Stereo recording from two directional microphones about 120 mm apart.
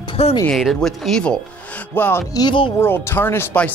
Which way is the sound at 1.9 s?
15° left (ahead or behind).